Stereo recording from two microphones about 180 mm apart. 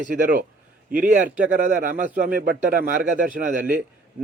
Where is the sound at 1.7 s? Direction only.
45° right (ahead or behind).